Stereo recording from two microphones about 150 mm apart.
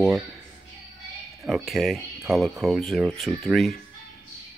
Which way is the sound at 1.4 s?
Centre (ahead or behind).